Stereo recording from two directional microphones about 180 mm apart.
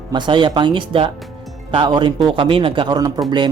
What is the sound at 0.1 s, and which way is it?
Speech, 25° right (ahead or behind).